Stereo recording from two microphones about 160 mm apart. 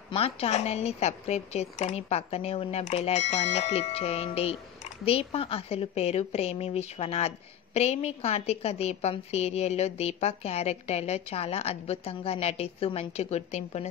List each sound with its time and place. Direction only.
0.1 s a woman's voice: 40° left (ahead or behind)